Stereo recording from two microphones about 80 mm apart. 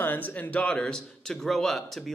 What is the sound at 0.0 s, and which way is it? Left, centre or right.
A man's voice, left.